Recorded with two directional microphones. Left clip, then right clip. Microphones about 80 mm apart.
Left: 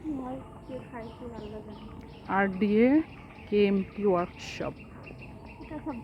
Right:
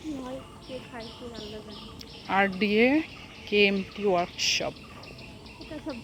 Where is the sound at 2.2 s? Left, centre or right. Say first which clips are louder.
Right 3 dB; centre.